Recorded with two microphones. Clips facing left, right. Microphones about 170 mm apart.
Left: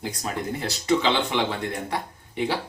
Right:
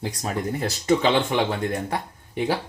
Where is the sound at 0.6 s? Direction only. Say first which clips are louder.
Right 2 dB; 45° right (ahead or behind).